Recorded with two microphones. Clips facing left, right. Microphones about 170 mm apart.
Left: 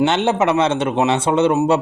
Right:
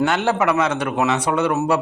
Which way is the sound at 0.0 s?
20° left (ahead or behind).